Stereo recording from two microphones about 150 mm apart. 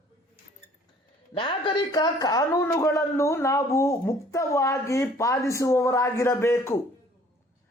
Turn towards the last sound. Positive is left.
turn(degrees=15)  # may be behind; listen again after turning